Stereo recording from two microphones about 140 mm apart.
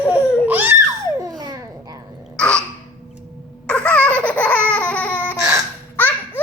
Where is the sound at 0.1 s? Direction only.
10° right (ahead or behind); by 1.6 s 30° right (ahead or behind).